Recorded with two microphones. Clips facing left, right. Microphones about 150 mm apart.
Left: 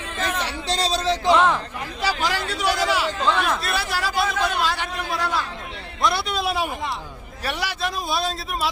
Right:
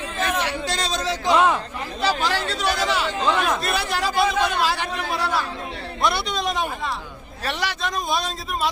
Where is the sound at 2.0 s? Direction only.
10° left (ahead or behind).